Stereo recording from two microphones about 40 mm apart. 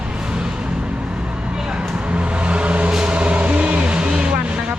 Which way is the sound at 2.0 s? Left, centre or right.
Right.